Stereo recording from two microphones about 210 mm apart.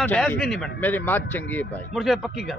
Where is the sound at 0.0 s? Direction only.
5° left (ahead or behind).